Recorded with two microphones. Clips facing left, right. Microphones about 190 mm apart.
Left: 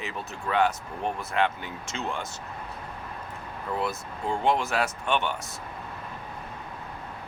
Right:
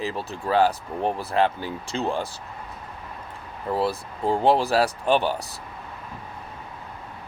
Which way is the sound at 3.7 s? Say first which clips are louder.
Right 6 dB; 35° right (ahead or behind).